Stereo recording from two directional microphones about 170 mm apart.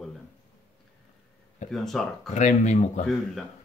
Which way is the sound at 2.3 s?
45° left (ahead or behind).